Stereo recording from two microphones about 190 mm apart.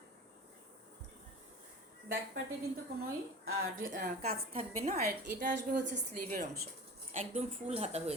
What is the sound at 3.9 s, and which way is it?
Speech, 45° right (ahead or behind).